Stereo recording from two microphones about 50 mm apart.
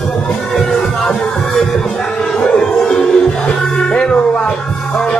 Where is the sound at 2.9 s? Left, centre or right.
Centre.